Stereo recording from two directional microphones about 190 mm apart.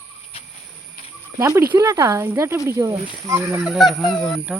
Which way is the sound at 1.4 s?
15° right (ahead or behind).